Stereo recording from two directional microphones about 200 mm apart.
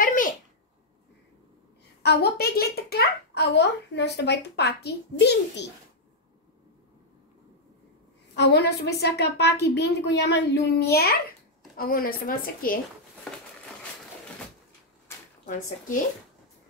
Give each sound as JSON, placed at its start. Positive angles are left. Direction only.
{"t": 0.0, "sound": "a sound", "side_deg": 40}
{"t": 2.0, "sound": "a child's voice", "side_deg": 50}
{"t": 8.4, "sound": "a child's voice", "side_deg": 60}